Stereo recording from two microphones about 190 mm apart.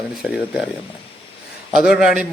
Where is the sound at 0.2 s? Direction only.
5° right (ahead or behind).